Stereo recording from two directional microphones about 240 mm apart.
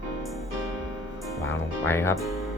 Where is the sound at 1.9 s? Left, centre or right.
Centre.